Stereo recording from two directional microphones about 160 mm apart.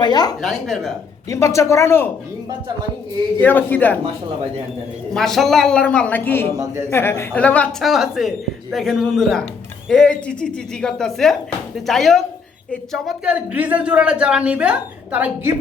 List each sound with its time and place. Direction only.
0.0 s a woman's voice: 25° left (ahead or behind)
0.4 s speech: centre (ahead or behind)
1.3 s a woman's voice: 20° left (ahead or behind)
3.4 s a woman's voice: 10° left (ahead or behind)
5.1 s a woman's voice: centre (ahead or behind)